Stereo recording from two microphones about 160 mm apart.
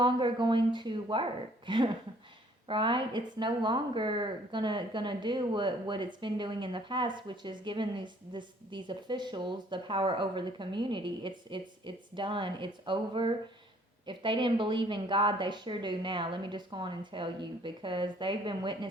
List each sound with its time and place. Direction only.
0.0 s a woman's voice: 30° right (ahead or behind)